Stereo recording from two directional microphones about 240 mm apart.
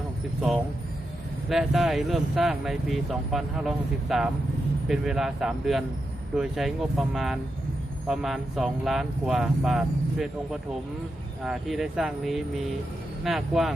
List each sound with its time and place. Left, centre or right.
1.5 s speech: centre